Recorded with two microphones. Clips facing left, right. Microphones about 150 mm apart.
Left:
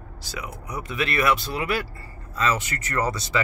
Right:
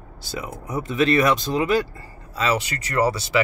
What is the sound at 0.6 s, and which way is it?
Speech, 25° right (ahead or behind).